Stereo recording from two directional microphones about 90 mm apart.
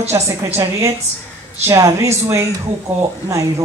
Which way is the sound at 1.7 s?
35° right (ahead or behind).